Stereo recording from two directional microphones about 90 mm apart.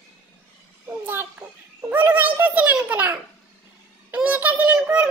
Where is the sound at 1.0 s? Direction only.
20° right (ahead or behind).